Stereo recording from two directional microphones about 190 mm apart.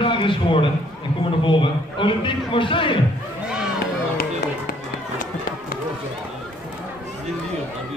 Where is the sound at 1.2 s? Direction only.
25° left (ahead or behind).